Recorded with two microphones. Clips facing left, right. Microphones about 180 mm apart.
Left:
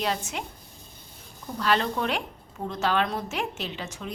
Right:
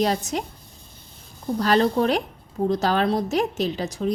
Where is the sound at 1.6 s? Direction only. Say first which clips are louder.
Right 6 dB; 40° right (ahead or behind).